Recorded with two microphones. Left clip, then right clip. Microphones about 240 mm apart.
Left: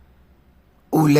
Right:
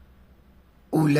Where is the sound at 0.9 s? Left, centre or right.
Left.